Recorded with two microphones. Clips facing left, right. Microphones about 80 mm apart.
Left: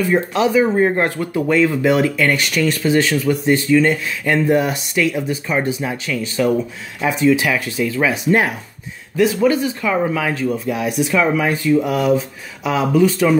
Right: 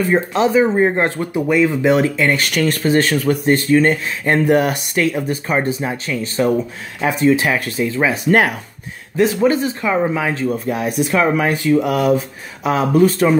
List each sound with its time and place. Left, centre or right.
0.0 s speech: right
2.5 s speech: right
4.5 s speech: right
5.0 s speech: right
9.1 s speech: right
10.5 s speech: right
11.5 s speech: right